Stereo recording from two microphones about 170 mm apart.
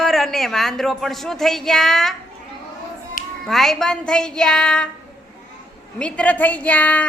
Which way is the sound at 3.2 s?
55° left (ahead or behind).